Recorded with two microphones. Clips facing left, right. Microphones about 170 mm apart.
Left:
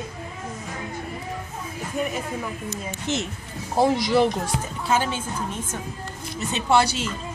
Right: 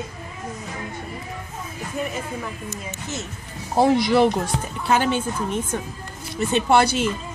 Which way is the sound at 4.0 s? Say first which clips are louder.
Right 2 dB; 60° right (ahead or behind).